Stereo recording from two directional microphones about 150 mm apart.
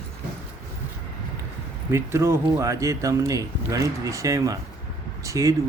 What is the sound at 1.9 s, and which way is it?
Speech, 20° right (ahead or behind).